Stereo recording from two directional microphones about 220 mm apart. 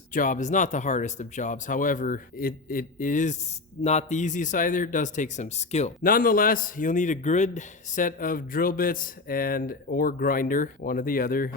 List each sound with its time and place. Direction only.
0.1 s speech: 35° left (ahead or behind)